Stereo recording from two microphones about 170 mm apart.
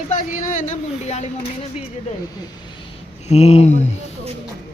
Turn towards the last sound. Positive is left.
turn(degrees=40)  # may be behind; listen again after turning